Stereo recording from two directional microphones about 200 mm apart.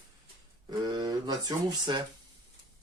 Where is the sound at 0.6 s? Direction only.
20° right (ahead or behind).